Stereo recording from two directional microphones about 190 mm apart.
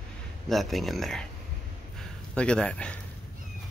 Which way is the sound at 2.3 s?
5° left (ahead or behind).